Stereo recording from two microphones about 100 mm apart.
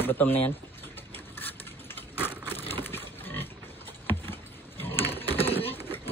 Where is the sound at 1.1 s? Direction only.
20° left (ahead or behind).